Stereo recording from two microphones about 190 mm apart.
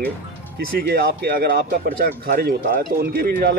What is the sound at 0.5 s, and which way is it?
Speech, 50° right (ahead or behind).